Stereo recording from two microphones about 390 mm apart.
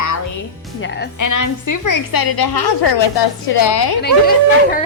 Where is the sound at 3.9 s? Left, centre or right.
Left.